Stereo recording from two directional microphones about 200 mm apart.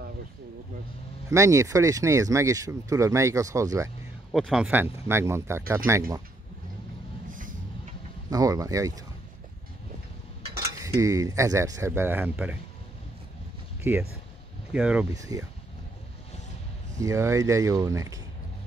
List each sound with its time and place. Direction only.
1.3 s speech: 15° right (ahead or behind)
4.3 s speech: centre (ahead or behind)
7.2 s a sound: 40° right (ahead or behind)
8.3 s speech: 15° right (ahead or behind)
10.8 s speech: 15° right (ahead or behind)
13.9 s speech: 10° right (ahead or behind)
15.1 s speech: 15° right (ahead or behind)
17.0 s speech: 15° right (ahead or behind)